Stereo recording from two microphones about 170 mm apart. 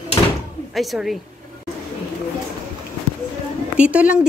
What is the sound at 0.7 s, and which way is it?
Speech, centre (ahead or behind).